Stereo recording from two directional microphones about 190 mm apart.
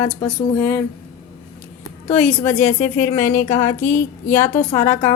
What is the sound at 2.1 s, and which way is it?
A woman's voice, 5° left (ahead or behind).